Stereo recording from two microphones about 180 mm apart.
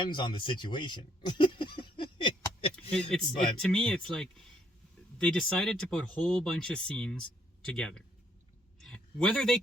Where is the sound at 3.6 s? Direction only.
5° left (ahead or behind).